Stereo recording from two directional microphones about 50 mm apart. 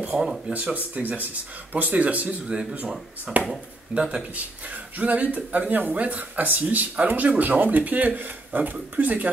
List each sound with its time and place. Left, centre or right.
0.1 s speech: right
0.5 s speech: right
4.6 s speech: right